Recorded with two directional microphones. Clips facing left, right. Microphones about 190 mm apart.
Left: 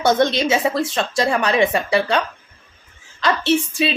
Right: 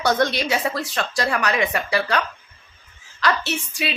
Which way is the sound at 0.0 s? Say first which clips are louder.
Left 4 dB; 25° left (ahead or behind).